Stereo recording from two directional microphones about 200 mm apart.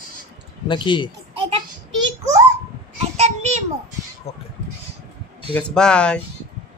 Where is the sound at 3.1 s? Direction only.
30° right (ahead or behind).